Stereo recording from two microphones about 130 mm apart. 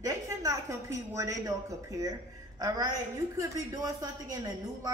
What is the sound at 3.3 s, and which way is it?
A man's voice, 25° right (ahead or behind).